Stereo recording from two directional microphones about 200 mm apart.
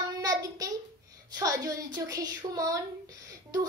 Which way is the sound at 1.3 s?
15° right (ahead or behind).